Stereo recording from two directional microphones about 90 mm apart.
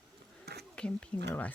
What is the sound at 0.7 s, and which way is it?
Speech, 10° left (ahead or behind).